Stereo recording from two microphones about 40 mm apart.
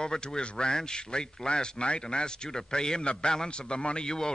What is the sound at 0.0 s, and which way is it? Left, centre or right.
Speech, centre.